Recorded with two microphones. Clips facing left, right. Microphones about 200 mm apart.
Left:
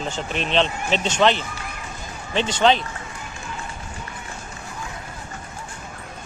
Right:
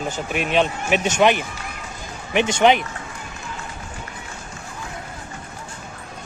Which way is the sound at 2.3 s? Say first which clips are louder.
Right 2 dB; 15° right (ahead or behind).